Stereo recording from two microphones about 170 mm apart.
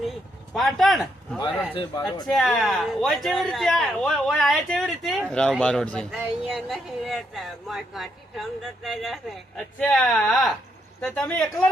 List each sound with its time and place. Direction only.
0.5 s speech: centre (ahead or behind)
1.7 s speech: 25° left (ahead or behind)
2.2 s a woman's voice: centre (ahead or behind)